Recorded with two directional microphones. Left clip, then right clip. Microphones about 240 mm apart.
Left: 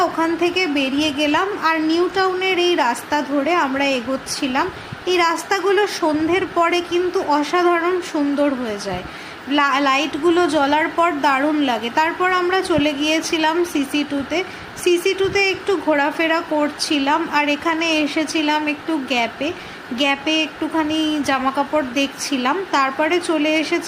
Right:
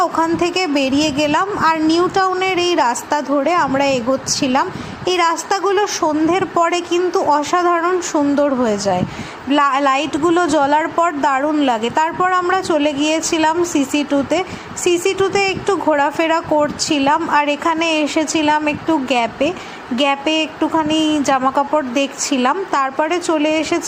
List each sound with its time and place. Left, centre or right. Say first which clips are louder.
0.0 s a woman's voice: right 2 dB; centre